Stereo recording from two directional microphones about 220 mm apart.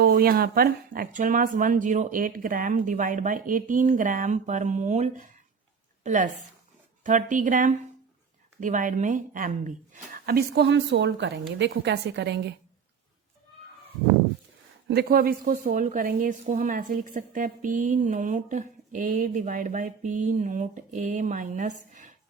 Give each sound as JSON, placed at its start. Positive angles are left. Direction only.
{"t": 0.0, "sound": "a woman's voice", "side_deg": -45}
{"t": 14.8, "sound": "a woman's voice", "side_deg": -45}